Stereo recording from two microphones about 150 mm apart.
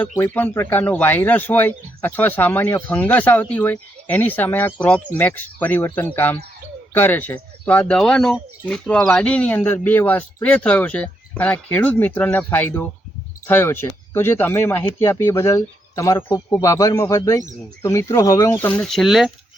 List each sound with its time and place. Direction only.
0.2 s speech: 10° left (ahead or behind)
18.7 s speech: 5° left (ahead or behind)